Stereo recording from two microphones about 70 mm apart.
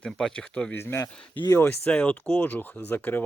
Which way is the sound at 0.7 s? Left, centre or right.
Left.